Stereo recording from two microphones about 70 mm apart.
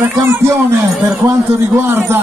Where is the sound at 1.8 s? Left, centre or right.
Right.